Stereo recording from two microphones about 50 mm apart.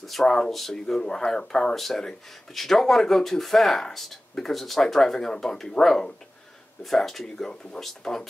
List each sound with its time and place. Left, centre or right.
0.0 s speech: centre